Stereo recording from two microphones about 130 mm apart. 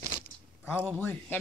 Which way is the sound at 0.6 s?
15° left (ahead or behind).